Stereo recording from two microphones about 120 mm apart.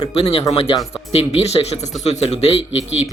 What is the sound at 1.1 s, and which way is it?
Speech, 60° left (ahead or behind).